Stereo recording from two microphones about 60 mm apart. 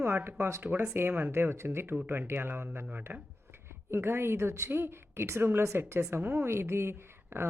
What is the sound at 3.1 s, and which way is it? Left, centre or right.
Speech, right.